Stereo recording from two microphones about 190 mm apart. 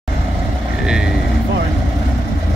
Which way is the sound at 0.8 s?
5° right (ahead or behind).